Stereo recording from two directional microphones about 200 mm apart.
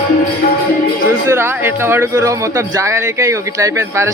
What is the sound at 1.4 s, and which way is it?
Speech, 10° right (ahead or behind).